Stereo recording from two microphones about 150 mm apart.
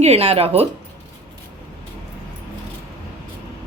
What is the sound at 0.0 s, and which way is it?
Speech, 45° right (ahead or behind).